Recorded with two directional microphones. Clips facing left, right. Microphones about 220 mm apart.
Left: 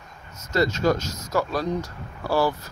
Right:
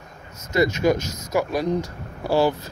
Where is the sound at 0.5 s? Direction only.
15° right (ahead or behind).